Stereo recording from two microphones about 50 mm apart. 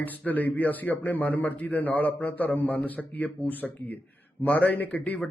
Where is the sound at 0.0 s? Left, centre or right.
Left.